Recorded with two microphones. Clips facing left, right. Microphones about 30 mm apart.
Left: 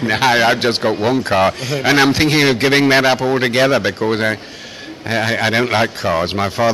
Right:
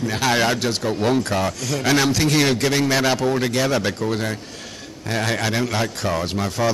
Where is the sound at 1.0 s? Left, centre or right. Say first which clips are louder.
Left 3 dB; centre.